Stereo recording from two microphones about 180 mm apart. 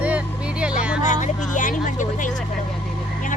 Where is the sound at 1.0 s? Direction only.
40° left (ahead or behind).